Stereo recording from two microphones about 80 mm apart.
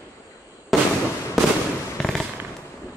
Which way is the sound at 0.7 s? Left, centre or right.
Centre.